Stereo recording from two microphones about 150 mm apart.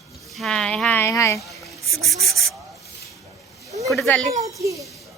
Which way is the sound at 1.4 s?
Centre (ahead or behind).